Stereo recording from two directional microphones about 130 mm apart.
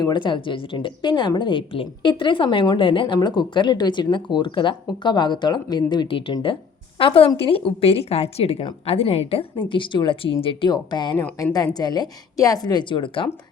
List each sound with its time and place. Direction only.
0.0 s a woman's voice: 35° left (ahead or behind)